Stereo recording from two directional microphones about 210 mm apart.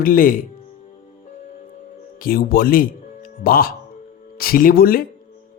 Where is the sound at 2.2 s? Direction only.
45° left (ahead or behind).